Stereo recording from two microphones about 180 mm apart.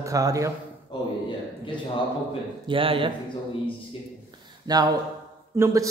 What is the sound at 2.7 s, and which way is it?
Speech, 30° right (ahead or behind).